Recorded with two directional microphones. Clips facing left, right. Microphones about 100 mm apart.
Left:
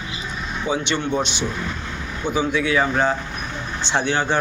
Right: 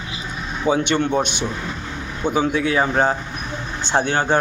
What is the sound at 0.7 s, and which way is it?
Speech, 50° right (ahead or behind).